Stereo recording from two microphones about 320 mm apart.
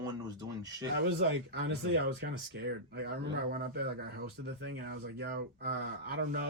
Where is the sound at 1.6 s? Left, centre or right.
Right.